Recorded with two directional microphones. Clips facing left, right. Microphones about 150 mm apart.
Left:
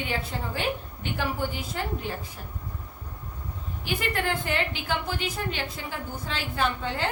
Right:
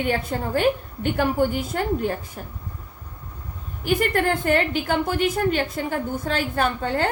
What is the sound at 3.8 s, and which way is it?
A woman's voice, 50° right (ahead or behind).